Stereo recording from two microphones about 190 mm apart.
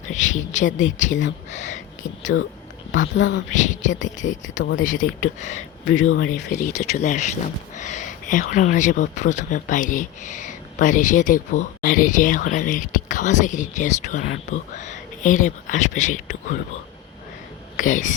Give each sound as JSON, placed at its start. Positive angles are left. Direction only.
{"t": 0.1, "sound": "speech", "side_deg": 40}
{"t": 2.9, "sound": "a woman's voice", "side_deg": 75}
{"t": 3.5, "sound": "speech", "side_deg": 40}
{"t": 6.1, "sound": "speech", "side_deg": 80}
{"t": 6.5, "sound": "speech", "side_deg": 40}
{"t": 17.7, "sound": "speech", "side_deg": 45}